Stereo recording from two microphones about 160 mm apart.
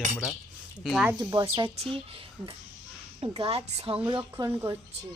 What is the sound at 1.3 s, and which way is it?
Speech, 25° right (ahead or behind).